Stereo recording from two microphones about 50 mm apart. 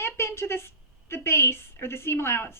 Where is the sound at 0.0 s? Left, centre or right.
Left.